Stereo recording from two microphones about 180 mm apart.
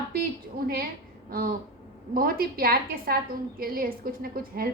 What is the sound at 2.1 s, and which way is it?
A woman's voice, 55° right (ahead or behind).